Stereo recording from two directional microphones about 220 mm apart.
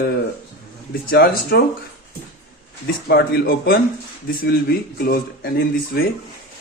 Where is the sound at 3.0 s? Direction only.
45° left (ahead or behind).